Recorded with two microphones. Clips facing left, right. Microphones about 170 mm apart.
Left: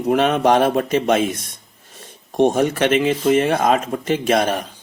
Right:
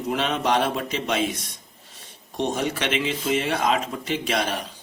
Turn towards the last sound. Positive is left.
turn(degrees=50)  # may be behind; listen again after turning